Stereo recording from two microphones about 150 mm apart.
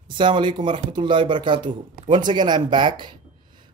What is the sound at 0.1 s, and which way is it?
Speech, 35° right (ahead or behind).